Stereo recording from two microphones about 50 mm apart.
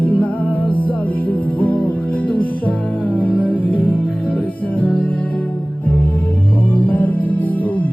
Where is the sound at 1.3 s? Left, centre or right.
Left.